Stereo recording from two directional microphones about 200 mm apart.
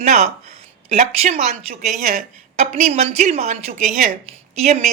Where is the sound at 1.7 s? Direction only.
45° right (ahead or behind).